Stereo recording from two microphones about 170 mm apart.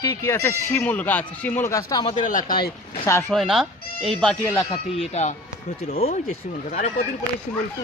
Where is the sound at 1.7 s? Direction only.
20° left (ahead or behind).